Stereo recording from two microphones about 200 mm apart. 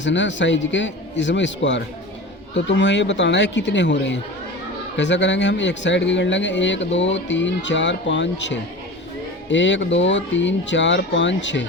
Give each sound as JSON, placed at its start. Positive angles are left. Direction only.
{"t": 0.0, "sound": "speech", "side_deg": 65}